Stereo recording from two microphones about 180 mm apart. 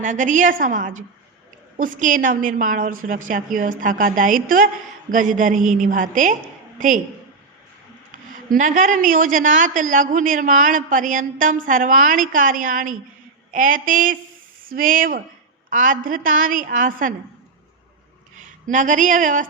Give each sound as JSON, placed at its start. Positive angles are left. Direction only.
{"t": 0.0, "sound": "a woman's voice", "side_deg": -45}
{"t": 8.1, "sound": "a woman's voice", "side_deg": -50}
{"t": 18.3, "sound": "speech", "side_deg": -45}